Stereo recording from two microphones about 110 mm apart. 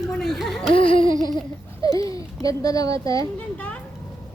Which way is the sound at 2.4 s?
30° left (ahead or behind).